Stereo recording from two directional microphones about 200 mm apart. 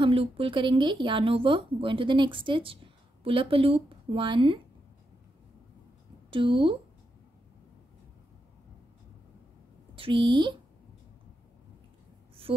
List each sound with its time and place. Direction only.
0.0 s a woman's voice: 25° right (ahead or behind)
6.3 s a woman's voice: 25° right (ahead or behind)
9.9 s speech: 25° right (ahead or behind)
12.5 s a woman's voice: 25° right (ahead or behind)